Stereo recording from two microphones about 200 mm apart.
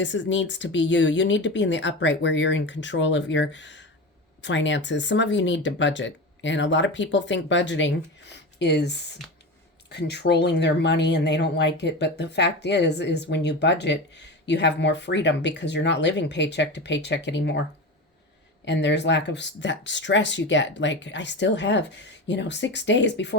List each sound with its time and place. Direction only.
0.0 s speech: 65° left (ahead or behind)
18.6 s speech: 60° left (ahead or behind)